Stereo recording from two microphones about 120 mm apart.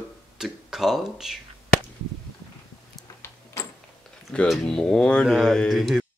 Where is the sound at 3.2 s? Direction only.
20° left (ahead or behind).